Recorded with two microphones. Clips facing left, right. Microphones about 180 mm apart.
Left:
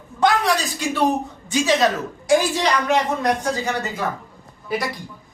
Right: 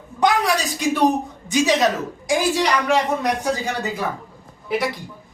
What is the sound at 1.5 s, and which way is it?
Speech, 15° right (ahead or behind).